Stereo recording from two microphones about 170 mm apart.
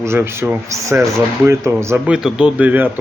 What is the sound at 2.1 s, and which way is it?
Speech, 5° right (ahead or behind).